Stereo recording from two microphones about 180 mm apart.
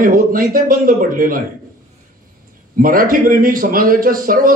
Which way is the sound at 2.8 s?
50° right (ahead or behind).